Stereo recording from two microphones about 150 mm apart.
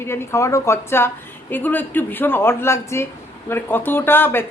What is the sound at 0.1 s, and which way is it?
Speech, 15° left (ahead or behind).